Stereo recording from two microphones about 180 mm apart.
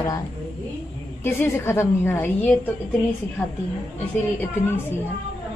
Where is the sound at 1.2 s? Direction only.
10° left (ahead or behind).